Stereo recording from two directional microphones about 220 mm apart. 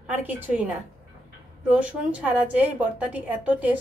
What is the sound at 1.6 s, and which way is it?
A woman's voice, 5° right (ahead or behind).